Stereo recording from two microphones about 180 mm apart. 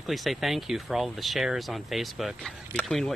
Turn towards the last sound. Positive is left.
turn(degrees=0)  # may be behind; listen again after turning